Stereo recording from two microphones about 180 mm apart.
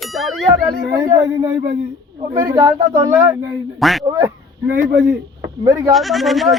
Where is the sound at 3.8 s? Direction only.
Centre (ahead or behind).